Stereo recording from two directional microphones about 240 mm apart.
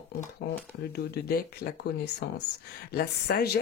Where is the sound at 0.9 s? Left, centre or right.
Left.